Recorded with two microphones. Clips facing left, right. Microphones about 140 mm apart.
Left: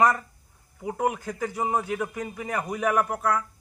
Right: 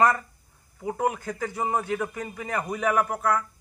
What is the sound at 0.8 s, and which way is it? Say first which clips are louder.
A man's voice: even; 15° left (ahead or behind).